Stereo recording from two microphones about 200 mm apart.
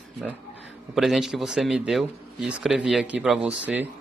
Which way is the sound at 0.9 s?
Centre (ahead or behind).